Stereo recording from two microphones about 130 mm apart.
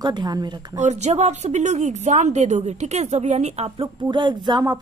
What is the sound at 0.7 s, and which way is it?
Speech, 60° right (ahead or behind).